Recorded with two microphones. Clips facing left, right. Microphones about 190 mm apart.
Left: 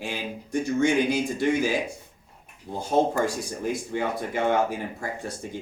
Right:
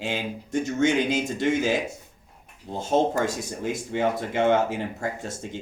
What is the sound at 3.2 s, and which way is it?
Speech, 20° right (ahead or behind).